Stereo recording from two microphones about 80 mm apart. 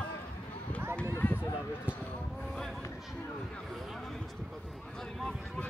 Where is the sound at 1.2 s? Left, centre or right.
Left.